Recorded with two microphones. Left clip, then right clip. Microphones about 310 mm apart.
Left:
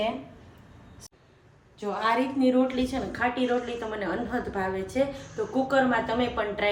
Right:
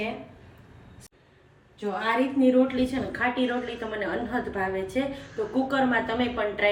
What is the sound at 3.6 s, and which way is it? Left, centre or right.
Speech, centre.